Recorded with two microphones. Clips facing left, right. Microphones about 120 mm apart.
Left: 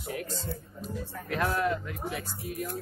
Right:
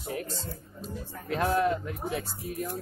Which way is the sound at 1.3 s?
30° right (ahead or behind).